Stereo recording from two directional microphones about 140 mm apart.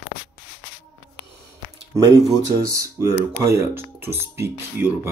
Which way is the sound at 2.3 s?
20° right (ahead or behind).